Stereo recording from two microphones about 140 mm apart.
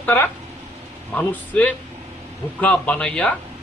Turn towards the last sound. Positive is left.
turn(degrees=5)  # may be behind; listen again after turning